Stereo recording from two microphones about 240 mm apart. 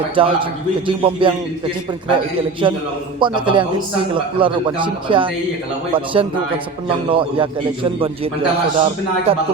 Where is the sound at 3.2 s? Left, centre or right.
Centre.